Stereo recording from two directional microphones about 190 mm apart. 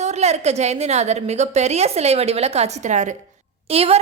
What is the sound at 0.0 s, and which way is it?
A woman's voice, 35° right (ahead or behind).